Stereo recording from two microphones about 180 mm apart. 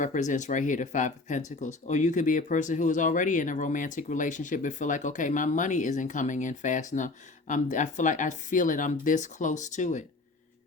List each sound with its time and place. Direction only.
0.0 s speech: 45° left (ahead or behind)